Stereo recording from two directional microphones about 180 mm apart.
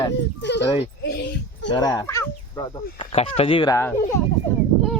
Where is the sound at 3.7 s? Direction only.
15° left (ahead or behind).